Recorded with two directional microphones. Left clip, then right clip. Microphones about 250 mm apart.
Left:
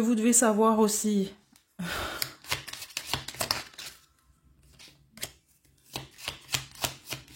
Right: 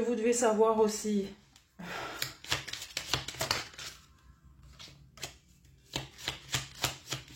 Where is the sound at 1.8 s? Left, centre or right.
Left.